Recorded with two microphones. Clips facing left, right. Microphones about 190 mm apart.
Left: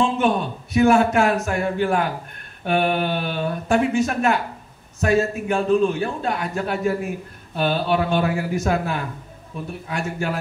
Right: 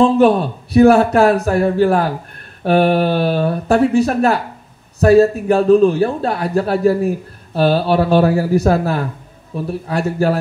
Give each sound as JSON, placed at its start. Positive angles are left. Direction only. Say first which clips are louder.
{"t": 0.0, "sound": "a man's voice", "louder": "right 8 dB", "side_deg": -35}